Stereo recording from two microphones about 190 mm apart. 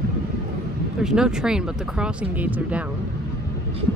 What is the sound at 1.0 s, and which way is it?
Speech, 5° right (ahead or behind).